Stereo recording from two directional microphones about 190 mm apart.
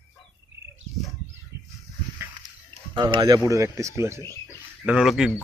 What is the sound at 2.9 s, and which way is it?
Speech, 25° right (ahead or behind).